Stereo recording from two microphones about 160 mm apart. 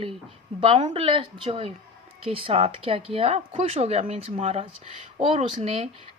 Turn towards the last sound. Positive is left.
turn(degrees=-40)  # may be behind; listen again after turning